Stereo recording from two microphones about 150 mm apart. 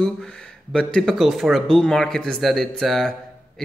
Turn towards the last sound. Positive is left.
turn(degrees=5)  # may be behind; listen again after turning